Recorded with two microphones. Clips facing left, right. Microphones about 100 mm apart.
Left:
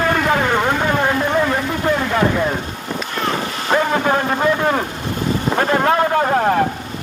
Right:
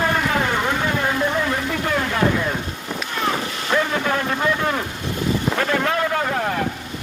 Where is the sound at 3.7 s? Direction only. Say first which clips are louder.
Left 4 dB; 35° left (ahead or behind).